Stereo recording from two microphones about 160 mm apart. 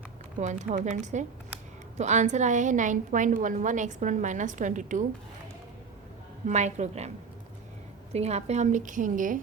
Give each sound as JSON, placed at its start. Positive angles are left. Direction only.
{"t": 0.3, "sound": "a woman's voice", "side_deg": -50}
{"t": 6.5, "sound": "a woman's voice", "side_deg": -45}
{"t": 8.1, "sound": "a woman's voice", "side_deg": -40}